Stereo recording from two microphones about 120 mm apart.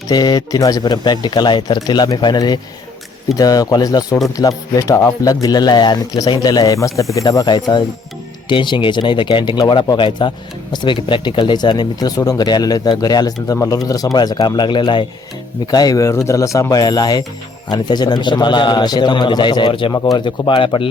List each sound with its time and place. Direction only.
0.1 s speech: 35° left (ahead or behind)